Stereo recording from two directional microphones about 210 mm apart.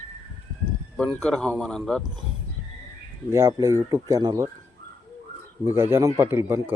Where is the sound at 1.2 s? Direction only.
5° left (ahead or behind).